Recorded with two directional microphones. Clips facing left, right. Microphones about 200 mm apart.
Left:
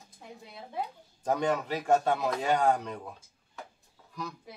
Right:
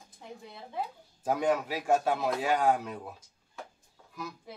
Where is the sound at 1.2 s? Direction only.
5° right (ahead or behind).